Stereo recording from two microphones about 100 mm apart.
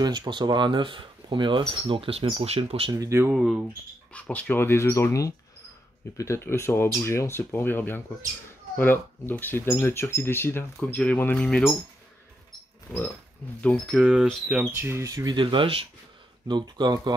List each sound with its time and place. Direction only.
0.0 s speech: 45° right (ahead or behind); by 2.2 s 70° right (ahead or behind)
2.3 s speech: 90° right
2.9 s speech: 35° right (ahead or behind)
4.1 s speech: 15° left (ahead or behind)
12.9 s speech: 20° left (ahead or behind)
13.9 s speech: 5° right (ahead or behind)
14.8 s speech: 25° right (ahead or behind)
15.3 s speech: 60° right (ahead or behind)
16.4 s speech: 50° right (ahead or behind)